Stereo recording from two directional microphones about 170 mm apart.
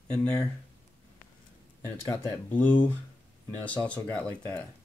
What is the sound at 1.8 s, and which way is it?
Speech, 10° left (ahead or behind).